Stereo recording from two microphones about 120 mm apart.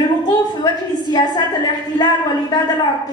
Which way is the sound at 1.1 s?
35° left (ahead or behind).